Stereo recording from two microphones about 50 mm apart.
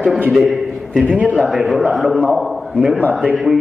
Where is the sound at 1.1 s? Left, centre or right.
Right.